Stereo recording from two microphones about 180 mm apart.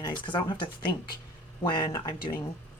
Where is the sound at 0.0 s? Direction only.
25° left (ahead or behind).